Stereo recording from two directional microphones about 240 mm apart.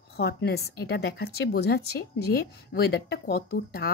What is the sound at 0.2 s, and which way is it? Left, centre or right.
Speech, left.